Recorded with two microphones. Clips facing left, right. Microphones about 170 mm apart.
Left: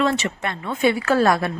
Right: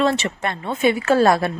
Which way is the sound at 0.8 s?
20° right (ahead or behind).